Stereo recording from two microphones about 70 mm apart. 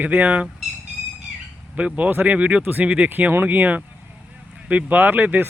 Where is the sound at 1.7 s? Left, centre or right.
Centre.